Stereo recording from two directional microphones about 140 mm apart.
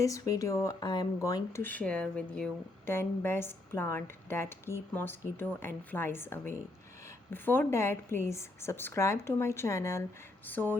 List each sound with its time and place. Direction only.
0.0 s speech: 25° left (ahead or behind)
1.6 s a woman's voice: 10° left (ahead or behind)